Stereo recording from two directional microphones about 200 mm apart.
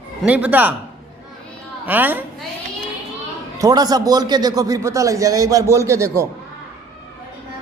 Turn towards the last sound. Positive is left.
turn(degrees=-15)  # may be behind; listen again after turning